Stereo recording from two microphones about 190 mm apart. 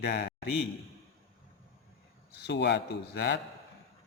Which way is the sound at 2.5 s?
65° left (ahead or behind).